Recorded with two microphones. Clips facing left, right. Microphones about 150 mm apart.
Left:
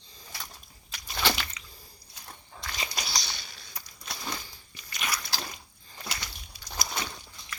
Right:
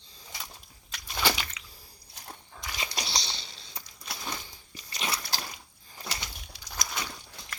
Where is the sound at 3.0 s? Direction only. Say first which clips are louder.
Right 1 dB; 25° right (ahead or behind).